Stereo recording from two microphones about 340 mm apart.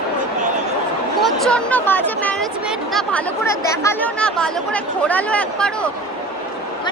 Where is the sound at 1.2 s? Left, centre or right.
Centre.